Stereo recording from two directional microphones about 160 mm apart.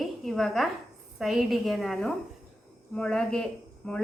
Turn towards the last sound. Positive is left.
turn(degrees=5)  # may be behind; listen again after turning